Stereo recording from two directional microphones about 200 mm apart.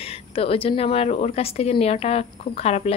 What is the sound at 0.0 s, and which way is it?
A woman's voice, 30° left (ahead or behind).